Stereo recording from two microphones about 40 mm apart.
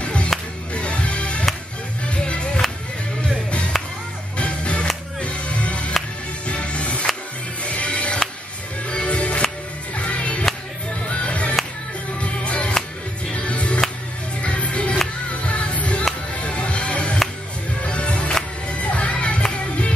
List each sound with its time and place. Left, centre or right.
0.0 s music: left
4.4 s music: left